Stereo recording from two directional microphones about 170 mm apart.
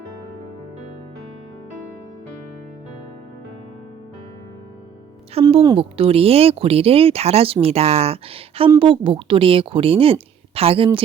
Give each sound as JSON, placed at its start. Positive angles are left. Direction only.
{"t": 5.3, "sound": "speech", "side_deg": -35}